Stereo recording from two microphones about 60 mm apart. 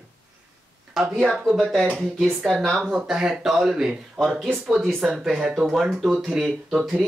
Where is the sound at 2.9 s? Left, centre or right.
Centre.